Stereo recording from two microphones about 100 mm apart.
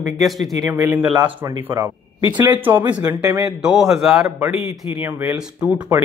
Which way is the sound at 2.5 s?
20° right (ahead or behind).